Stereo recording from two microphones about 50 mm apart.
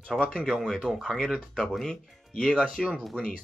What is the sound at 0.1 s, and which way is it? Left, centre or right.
Speech, centre.